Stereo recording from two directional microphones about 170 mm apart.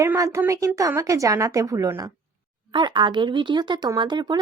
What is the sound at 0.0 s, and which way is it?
Speech, 15° right (ahead or behind).